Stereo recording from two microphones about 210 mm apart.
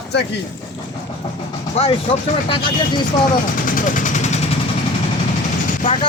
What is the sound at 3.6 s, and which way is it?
Vehicle, 40° left (ahead or behind).